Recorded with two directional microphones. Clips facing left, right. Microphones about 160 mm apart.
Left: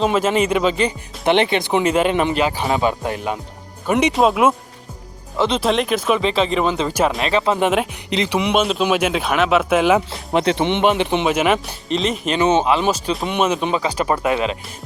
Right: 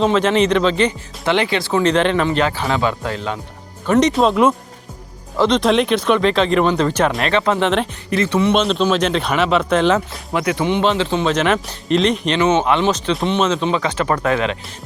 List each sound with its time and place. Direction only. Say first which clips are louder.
0.0 s speech: right 2 dB; 5° left (ahead or behind)
0.9 s speech: left 1 dB; 20° left (ahead or behind)
1.8 s speech: right 3 dB; 10° left (ahead or behind)
10.3 s speech: left 1 dB; 25° left (ahead or behind)